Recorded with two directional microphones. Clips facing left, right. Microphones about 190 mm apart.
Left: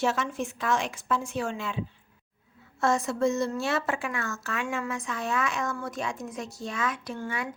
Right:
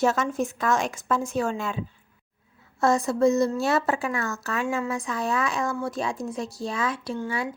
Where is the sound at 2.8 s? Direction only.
35° right (ahead or behind).